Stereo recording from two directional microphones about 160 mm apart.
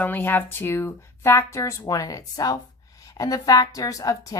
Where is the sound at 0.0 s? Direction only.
10° left (ahead or behind).